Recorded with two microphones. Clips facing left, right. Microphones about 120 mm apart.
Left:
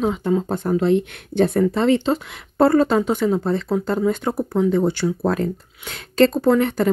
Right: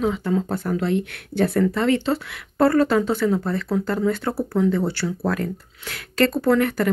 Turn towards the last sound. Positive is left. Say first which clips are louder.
# left 2 dB
turn(degrees=20)  # may be behind; listen again after turning